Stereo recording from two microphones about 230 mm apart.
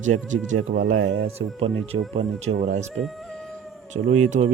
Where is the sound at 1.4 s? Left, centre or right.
Right.